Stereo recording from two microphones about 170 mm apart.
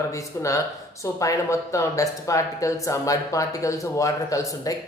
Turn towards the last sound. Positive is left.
turn(degrees=20)  # may be behind; listen again after turning